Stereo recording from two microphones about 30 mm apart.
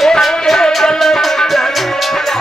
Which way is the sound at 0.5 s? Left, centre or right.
Centre.